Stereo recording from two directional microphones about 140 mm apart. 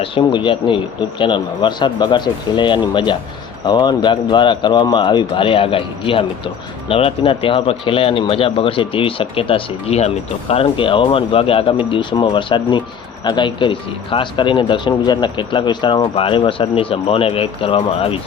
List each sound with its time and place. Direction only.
0.0 s speech: 35° left (ahead or behind)